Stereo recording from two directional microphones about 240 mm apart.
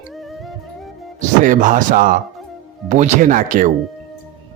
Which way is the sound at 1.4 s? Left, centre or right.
Right.